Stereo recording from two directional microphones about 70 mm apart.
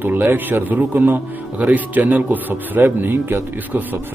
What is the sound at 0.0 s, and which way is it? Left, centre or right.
A man's voice, right.